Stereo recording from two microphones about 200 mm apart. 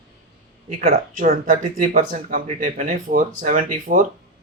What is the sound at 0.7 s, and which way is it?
Speech, 40° right (ahead or behind).